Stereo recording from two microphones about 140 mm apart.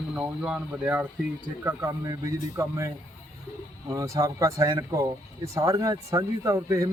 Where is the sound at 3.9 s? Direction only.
20° right (ahead or behind).